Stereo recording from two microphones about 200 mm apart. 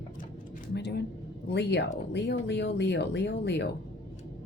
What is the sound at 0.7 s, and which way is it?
Speech, 55° left (ahead or behind).